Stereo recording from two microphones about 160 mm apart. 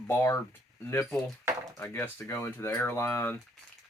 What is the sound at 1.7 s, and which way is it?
Speech, 15° left (ahead or behind).